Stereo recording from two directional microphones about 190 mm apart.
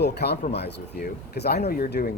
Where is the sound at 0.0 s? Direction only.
60° left (ahead or behind).